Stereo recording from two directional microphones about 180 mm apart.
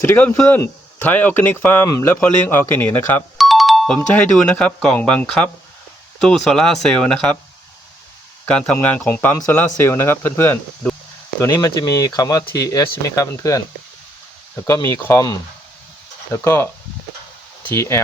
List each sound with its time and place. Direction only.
0.0 s speech: 10° left (ahead or behind)
3.3 s speech: centre (ahead or behind)
8.4 s speech: 5° left (ahead or behind)
17.7 s speech: 15° left (ahead or behind)